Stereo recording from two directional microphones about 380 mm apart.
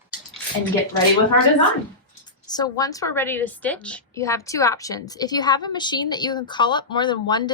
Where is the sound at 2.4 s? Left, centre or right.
Centre.